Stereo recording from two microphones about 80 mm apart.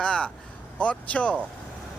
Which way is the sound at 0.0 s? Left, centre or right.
Centre.